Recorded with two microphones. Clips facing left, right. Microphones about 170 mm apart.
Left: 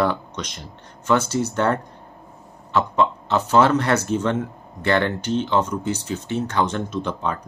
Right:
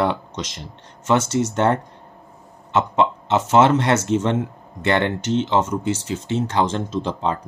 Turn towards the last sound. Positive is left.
turn(degrees=-25)  # may be behind; listen again after turning